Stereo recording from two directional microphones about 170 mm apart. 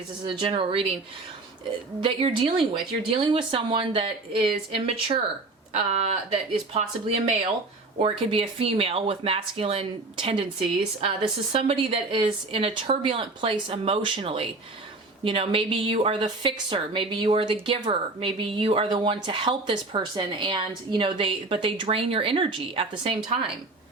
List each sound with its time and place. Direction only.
0.3 s a woman's voice: 30° right (ahead or behind)
2.0 s a woman's voice: 30° right (ahead or behind)